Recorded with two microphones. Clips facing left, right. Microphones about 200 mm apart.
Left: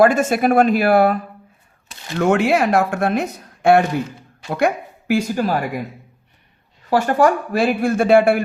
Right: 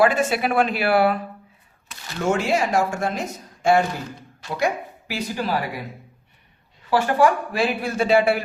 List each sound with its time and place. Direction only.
0.0 s speech: 45° left (ahead or behind)
2.1 s speech: 60° left (ahead or behind); by 5.8 s 45° left (ahead or behind)
6.9 s speech: 45° left (ahead or behind)